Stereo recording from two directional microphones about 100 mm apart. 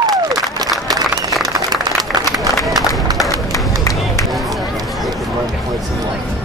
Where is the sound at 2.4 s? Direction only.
Centre (ahead or behind).